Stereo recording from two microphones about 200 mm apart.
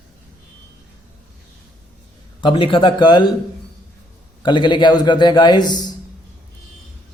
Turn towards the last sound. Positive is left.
turn(degrees=20)  # may be behind; listen again after turning